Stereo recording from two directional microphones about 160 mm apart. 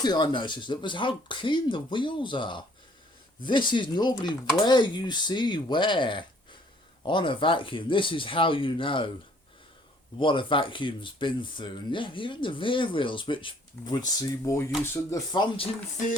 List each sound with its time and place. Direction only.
0.0 s speech: 25° left (ahead or behind)
10.2 s speech: 30° left (ahead or behind)